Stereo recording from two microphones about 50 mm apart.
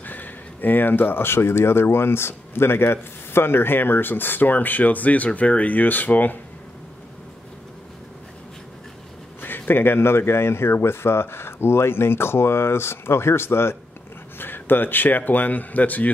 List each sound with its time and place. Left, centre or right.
0.0 s speech: left
9.4 s speech: left
14.4 s a man's voice: left